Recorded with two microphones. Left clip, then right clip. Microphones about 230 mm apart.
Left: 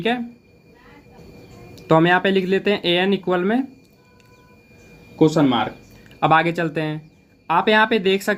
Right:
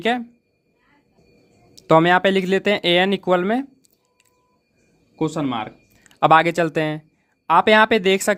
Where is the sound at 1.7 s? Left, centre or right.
Right.